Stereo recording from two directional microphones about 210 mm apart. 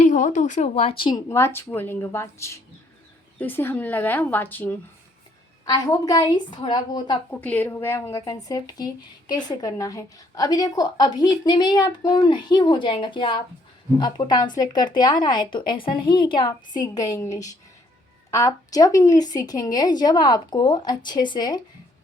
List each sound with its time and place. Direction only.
0.0 s a woman's voice: 35° left (ahead or behind)
1.3 s speech: 10° left (ahead or behind)
7.3 s speech: 10° left (ahead or behind)